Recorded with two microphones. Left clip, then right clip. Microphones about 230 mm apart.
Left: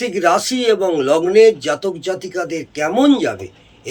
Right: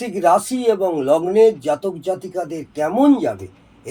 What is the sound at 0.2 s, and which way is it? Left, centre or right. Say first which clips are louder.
A man's voice: even; left.